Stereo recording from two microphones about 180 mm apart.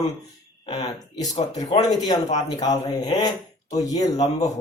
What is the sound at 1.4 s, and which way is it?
Speech, 40° left (ahead or behind).